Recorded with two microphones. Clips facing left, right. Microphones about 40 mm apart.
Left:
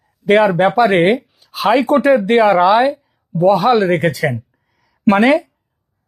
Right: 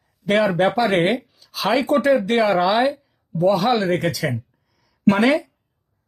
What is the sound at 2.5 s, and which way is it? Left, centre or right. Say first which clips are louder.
Speech: left 6 dB; centre.